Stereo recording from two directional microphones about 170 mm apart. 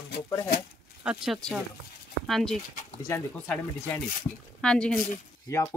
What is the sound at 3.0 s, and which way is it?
Speech, 15° left (ahead or behind).